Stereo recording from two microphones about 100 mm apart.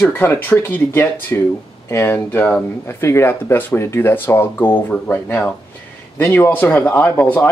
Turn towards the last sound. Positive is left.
turn(degrees=15)  # may be behind; listen again after turning